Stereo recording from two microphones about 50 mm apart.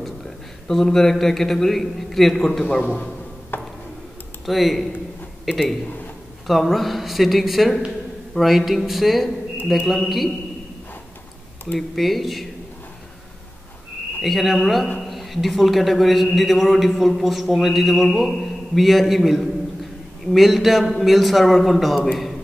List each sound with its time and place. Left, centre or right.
0.7 s a man's voice: centre
3.5 s a sound: left
4.5 s a man's voice: centre
11.9 s a man's voice: centre
14.2 s a man's voice: centre